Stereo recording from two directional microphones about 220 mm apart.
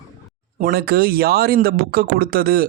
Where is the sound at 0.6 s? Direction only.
45° right (ahead or behind).